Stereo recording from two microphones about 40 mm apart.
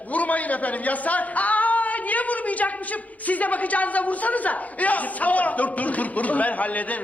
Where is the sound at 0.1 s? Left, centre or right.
Left.